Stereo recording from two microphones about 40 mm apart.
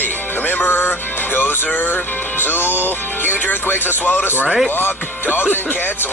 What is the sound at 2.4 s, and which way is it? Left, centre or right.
Speech, left.